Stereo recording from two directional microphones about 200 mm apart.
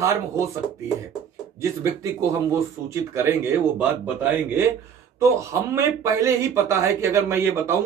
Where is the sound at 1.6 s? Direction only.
15° right (ahead or behind).